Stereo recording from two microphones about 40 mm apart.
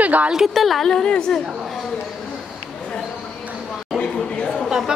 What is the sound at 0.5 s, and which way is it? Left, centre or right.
Speech, centre.